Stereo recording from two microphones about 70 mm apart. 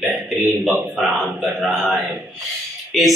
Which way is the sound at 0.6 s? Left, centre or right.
Centre.